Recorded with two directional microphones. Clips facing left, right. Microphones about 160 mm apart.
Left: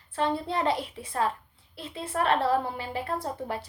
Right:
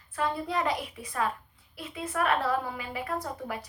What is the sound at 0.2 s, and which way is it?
A woman's voice, 30° left (ahead or behind).